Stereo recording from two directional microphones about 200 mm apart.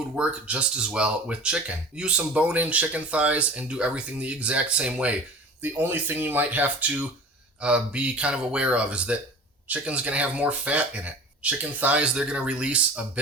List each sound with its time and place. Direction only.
0.2 s speech: 5° right (ahead or behind)